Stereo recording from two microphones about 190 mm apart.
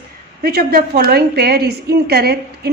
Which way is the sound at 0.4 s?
55° right (ahead or behind).